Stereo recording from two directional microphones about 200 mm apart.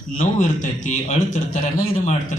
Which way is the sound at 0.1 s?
40° left (ahead or behind).